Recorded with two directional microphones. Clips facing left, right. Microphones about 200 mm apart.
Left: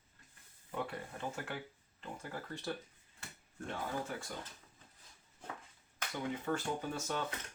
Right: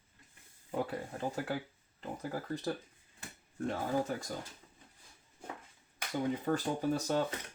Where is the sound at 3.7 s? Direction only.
40° right (ahead or behind).